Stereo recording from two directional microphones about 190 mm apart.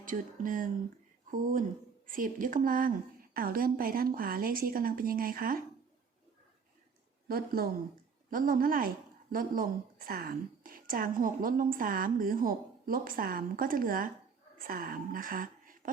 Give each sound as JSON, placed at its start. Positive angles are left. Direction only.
{"t": 0.0, "sound": "a woman's voice", "side_deg": -45}
{"t": 7.3, "sound": "a woman's voice", "side_deg": -50}